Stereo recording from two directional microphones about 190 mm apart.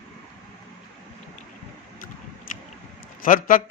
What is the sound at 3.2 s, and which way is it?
Speech, 45° left (ahead or behind).